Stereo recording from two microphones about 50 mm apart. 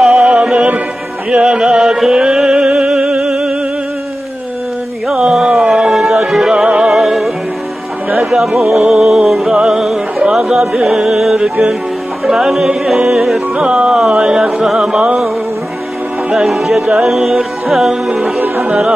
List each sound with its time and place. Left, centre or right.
0.0 s music: centre
5.0 s music: centre
16.4 s music: centre
18.4 s music: right